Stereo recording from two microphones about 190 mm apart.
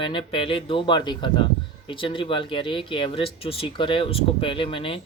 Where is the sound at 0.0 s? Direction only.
25° left (ahead or behind).